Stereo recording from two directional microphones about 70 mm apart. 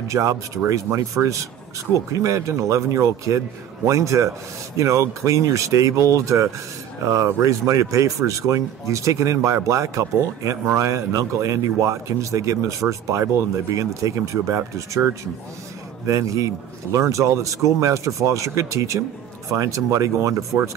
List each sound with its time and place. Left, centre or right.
0.1 s speech: right
13.7 s speech: right